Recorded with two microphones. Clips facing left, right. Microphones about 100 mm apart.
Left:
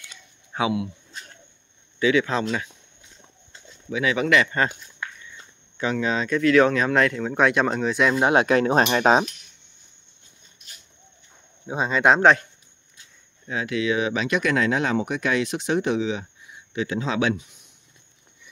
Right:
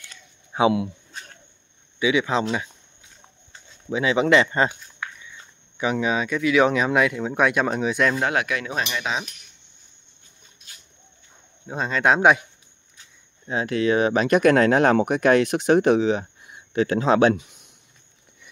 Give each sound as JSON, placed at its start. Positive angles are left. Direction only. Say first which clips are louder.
{"t": 0.5, "sound": "speech", "louder": "right 6 dB", "side_deg": -10}
{"t": 2.0, "sound": "speech", "louder": "even", "side_deg": -15}
{"t": 3.9, "sound": "speech", "louder": "right 3 dB", "side_deg": -25}
{"t": 5.8, "sound": "speech", "louder": "right 1 dB", "side_deg": -15}
{"t": 8.2, "sound": "speech", "louder": "left 5 dB", "side_deg": 25}
{"t": 8.5, "sound": "speech", "louder": "left 8 dB", "side_deg": 40}
{"t": 11.6, "sound": "a man's voice", "louder": "left 2 dB", "side_deg": 5}
{"t": 12.2, "sound": "speech", "louder": "even", "side_deg": -10}
{"t": 13.5, "sound": "speech", "louder": "right 3 dB", "side_deg": -35}